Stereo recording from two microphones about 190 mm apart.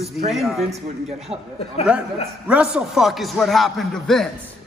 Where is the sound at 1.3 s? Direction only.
30° right (ahead or behind).